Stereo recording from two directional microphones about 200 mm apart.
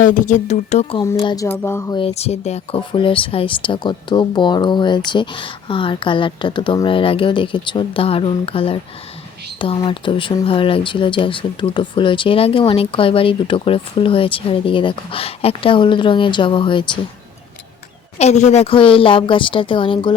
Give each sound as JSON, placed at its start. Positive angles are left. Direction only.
{"t": 0.0, "sound": "speech", "side_deg": 40}
{"t": 1.0, "sound": "speech", "side_deg": 20}
{"t": 2.0, "sound": "speech", "side_deg": 30}
{"t": 18.2, "sound": "speech", "side_deg": 35}